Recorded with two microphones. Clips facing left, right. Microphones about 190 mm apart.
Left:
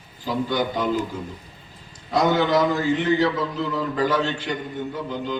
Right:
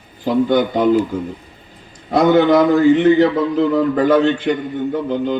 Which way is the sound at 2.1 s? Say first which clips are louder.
Right 8 dB; 60° right (ahead or behind).